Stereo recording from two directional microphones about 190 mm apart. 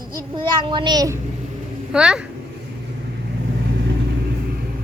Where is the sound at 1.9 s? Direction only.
5° right (ahead or behind).